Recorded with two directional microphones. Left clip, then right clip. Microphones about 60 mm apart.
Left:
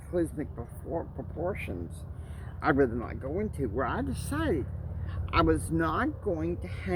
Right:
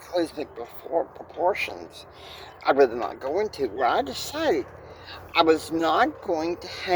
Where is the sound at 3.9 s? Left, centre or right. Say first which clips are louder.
Right 8 dB; left.